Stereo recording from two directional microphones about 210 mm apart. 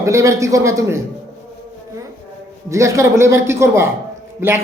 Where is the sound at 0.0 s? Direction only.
15° right (ahead or behind).